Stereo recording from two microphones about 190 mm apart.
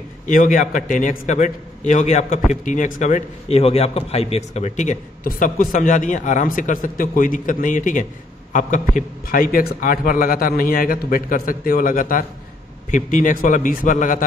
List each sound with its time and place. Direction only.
0.3 s a man's voice: 45° left (ahead or behind)